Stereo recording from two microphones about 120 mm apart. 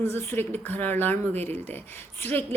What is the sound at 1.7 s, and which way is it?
Speech, 15° left (ahead or behind).